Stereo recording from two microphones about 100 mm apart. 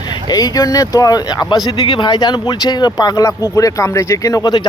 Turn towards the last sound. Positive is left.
turn(degrees=45)  # may be behind; listen again after turning